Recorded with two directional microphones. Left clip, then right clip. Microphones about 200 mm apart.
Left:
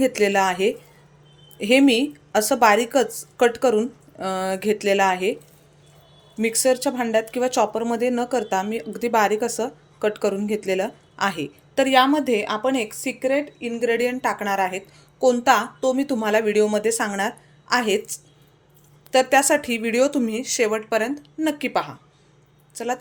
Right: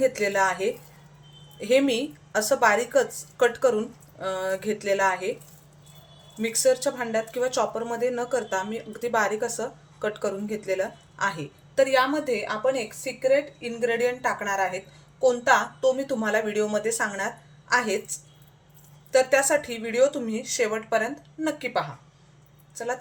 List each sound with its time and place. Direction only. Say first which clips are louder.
0.0 s speech: left 3 dB; 45° left (ahead or behind)
6.4 s speech: left 2 dB; 40° left (ahead or behind)